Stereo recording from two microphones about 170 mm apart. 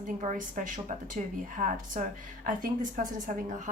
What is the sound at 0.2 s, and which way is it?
A woman's voice, 50° right (ahead or behind).